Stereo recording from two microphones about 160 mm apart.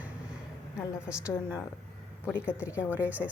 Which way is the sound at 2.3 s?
15° left (ahead or behind).